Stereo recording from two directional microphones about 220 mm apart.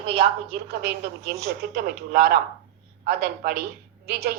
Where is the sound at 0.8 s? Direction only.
45° right (ahead or behind).